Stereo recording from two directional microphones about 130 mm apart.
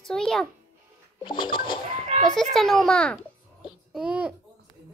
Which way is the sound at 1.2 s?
40° left (ahead or behind).